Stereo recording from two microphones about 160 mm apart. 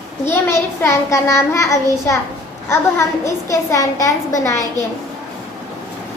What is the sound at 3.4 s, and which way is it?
A woman's voice, 20° left (ahead or behind).